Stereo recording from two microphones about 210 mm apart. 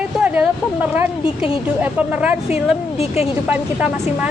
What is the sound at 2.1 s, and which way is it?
Speech, 5° right (ahead or behind).